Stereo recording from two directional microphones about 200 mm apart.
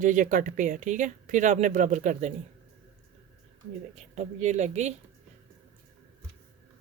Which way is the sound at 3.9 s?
35° right (ahead or behind).